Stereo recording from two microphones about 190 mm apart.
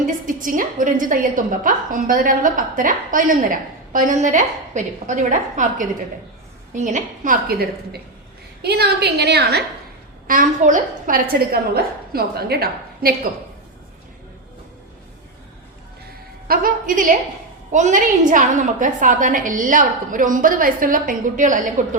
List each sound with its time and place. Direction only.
0.0 s a woman's voice: 45° right (ahead or behind)
6.7 s a woman's voice: 40° right (ahead or behind)
8.6 s a woman's voice: 60° right (ahead or behind)
10.2 s a woman's voice: 45° right (ahead or behind)
16.5 s a woman's voice: 45° right (ahead or behind)